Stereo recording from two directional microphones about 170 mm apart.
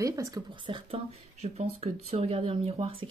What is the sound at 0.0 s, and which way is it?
Speech, 20° right (ahead or behind).